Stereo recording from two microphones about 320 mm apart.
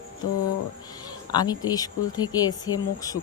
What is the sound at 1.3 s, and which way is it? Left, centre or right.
Speech, centre.